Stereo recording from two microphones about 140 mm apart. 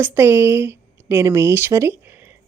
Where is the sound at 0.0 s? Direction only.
15° right (ahead or behind).